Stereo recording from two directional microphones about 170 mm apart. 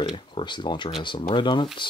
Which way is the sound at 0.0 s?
25° left (ahead or behind).